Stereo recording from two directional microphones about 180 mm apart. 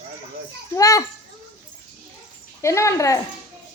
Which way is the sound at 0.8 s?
20° left (ahead or behind).